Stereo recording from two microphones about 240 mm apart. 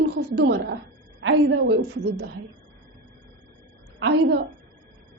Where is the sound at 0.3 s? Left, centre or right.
Right.